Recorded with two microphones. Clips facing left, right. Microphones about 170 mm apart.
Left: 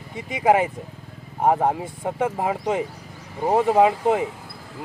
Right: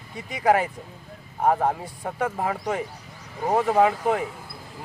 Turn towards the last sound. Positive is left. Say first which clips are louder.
# left 3 dB
turn(degrees=20)  # may be behind; listen again after turning